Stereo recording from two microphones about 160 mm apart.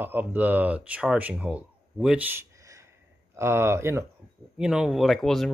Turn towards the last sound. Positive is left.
turn(degrees=0)  # may be behind; listen again after turning